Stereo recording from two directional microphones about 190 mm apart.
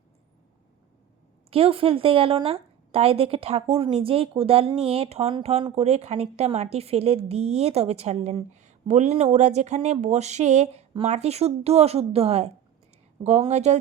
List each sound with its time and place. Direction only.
1.5 s a woman's voice: 30° right (ahead or behind)